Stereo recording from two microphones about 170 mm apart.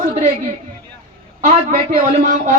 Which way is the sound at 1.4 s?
45° right (ahead or behind).